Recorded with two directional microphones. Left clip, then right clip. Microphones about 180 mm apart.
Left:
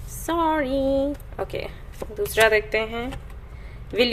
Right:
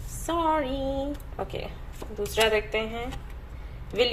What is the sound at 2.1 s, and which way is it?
Speech, 40° left (ahead or behind).